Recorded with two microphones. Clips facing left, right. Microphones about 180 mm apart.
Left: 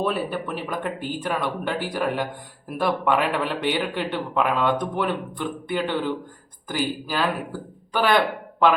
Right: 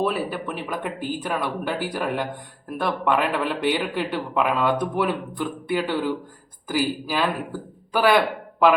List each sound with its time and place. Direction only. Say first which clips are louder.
0.0 s speech: right 1 dB; 5° right (ahead or behind)